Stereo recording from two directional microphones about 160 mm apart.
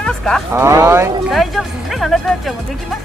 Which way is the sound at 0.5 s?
15° right (ahead or behind).